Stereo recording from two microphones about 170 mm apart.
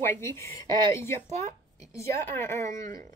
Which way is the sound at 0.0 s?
15° left (ahead or behind).